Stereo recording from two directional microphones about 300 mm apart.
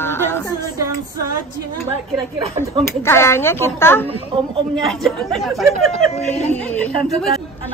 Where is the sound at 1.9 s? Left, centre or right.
Centre.